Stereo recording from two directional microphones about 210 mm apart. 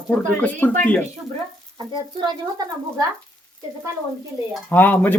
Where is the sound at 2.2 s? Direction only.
20° right (ahead or behind).